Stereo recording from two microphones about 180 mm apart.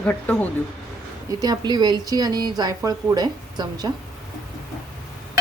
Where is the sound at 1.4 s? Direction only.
20° right (ahead or behind).